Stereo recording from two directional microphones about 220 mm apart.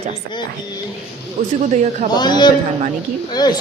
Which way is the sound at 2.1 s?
20° left (ahead or behind).